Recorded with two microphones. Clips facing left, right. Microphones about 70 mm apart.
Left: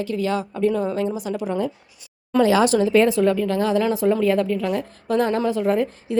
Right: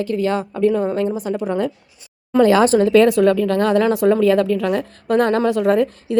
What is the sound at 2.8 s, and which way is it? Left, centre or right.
Speech, right.